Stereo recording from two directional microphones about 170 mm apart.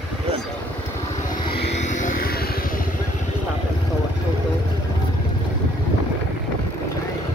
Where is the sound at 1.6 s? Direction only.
45° left (ahead or behind).